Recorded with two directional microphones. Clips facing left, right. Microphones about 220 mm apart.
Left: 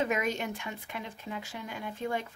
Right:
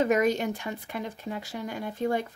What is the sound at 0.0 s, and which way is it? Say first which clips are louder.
Speech: right 7 dB; 40° right (ahead or behind).